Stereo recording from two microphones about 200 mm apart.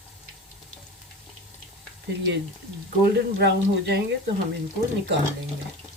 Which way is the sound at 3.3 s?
55° right (ahead or behind).